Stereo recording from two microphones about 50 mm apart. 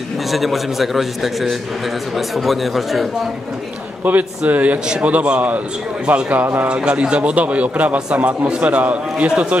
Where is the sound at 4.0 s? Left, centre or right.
Right.